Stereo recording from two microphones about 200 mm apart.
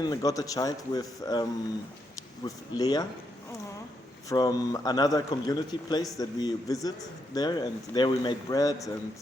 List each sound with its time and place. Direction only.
0.0 s speech: 20° left (ahead or behind)
4.3 s a man's voice: 15° left (ahead or behind)